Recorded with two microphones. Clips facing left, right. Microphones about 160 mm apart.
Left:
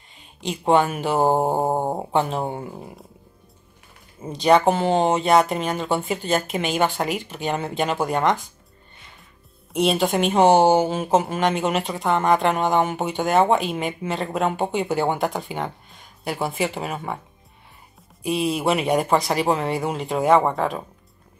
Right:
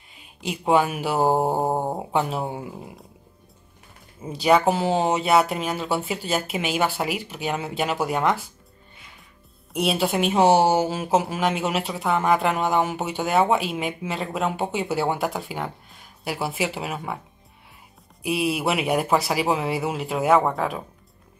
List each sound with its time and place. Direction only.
0.1 s speech: 5° right (ahead or behind)
1.3 s mantra: 15° left (ahead or behind)
2.0 s speech: 5° right (ahead or behind)
4.2 s speech: 5° right (ahead or behind)
9.8 s speech: 5° right (ahead or behind)
18.2 s speech: 5° right (ahead or behind)